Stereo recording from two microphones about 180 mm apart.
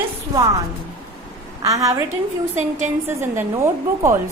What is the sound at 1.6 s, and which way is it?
Speech, 20° right (ahead or behind).